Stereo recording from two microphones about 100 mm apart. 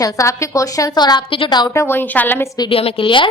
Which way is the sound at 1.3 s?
60° left (ahead or behind).